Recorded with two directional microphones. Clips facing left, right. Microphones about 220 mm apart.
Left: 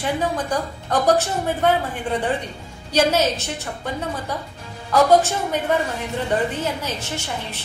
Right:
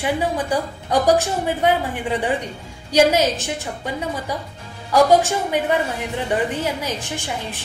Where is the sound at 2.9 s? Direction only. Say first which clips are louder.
Right 3 dB; 10° right (ahead or behind).